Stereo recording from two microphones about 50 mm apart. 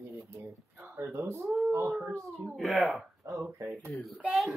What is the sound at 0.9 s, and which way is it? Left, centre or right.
Speech, right.